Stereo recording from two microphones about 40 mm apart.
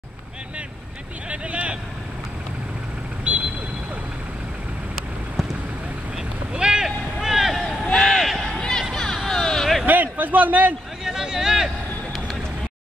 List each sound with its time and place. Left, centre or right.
1.3 s speech: right
3.3 s vehicle: right
6.5 s boat: right
7.2 s vehicle: centre
7.9 s a sound: centre
8.5 s music: centre
9.3 s vehicle: centre
9.8 s a man's voice: right
11.1 s vehicle: centre